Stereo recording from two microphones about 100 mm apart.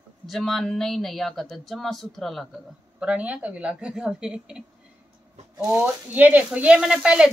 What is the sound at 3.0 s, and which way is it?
A woman's voice, 15° right (ahead or behind).